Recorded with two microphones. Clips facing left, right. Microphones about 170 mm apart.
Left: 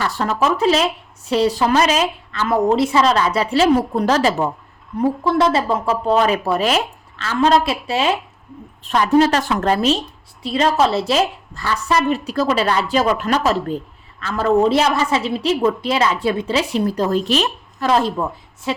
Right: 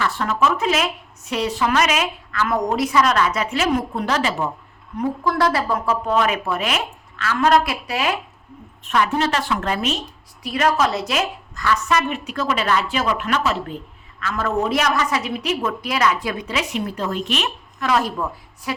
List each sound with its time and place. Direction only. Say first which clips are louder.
0.0 s a woman's voice: left 1 dB; 35° left (ahead or behind)
4.9 s a woman's voice: left 4 dB; 25° left (ahead or behind)